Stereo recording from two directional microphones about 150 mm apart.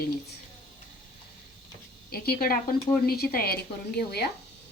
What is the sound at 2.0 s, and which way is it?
A woman's voice, 90° left.